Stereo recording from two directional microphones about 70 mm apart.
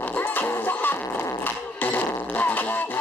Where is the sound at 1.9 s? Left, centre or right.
Left.